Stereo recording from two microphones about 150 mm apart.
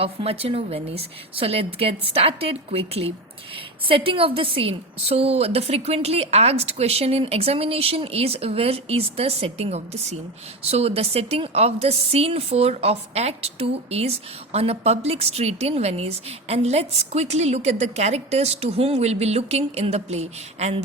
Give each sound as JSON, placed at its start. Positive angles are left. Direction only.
{"t": 0.0, "sound": "a woman's voice", "side_deg": -40}